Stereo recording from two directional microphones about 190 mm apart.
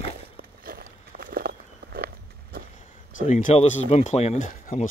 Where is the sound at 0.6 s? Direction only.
50° right (ahead or behind).